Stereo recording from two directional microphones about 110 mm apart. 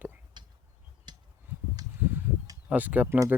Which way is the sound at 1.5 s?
20° right (ahead or behind).